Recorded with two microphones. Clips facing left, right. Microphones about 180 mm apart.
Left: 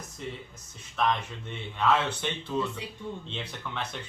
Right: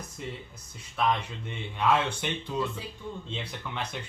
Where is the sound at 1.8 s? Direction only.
10° right (ahead or behind).